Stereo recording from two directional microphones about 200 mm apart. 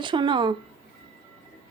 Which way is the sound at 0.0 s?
25° right (ahead or behind).